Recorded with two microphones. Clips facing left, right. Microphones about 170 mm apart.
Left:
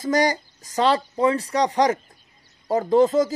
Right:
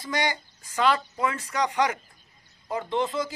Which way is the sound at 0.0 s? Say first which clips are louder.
Left 8 dB; 40° left (ahead or behind).